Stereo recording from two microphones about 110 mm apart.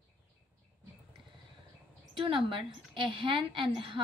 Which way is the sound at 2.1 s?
50° right (ahead or behind).